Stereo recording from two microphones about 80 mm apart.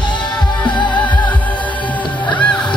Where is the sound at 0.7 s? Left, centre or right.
Left.